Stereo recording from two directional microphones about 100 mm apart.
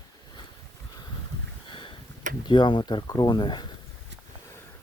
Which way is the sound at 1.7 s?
60° left (ahead or behind).